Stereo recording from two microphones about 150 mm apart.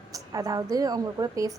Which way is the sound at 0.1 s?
25° right (ahead or behind).